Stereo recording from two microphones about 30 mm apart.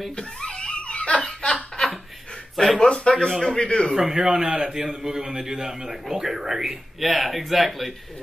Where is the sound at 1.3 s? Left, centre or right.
Left.